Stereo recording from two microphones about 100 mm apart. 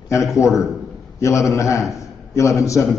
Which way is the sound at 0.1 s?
30° left (ahead or behind).